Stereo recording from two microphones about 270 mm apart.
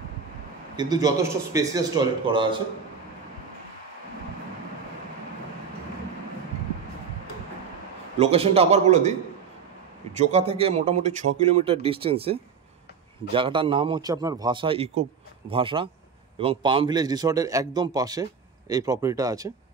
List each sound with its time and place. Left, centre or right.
0.7 s a man's voice: centre
8.2 s speech: right
10.1 s a man's voice: right